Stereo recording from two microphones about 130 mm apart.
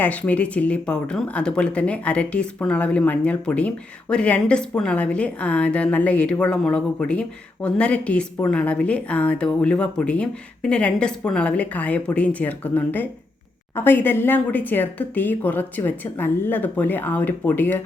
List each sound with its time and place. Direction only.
0.0 s speech: 10° left (ahead or behind)